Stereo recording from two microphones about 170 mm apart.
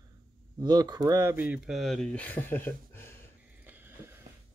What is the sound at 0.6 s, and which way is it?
Speech, 25° right (ahead or behind).